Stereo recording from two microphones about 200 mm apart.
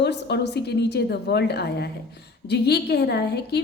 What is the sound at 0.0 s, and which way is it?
A woman's voice, 60° left (ahead or behind).